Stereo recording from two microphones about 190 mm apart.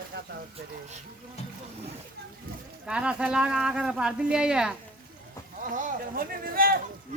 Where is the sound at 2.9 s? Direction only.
5° right (ahead or behind).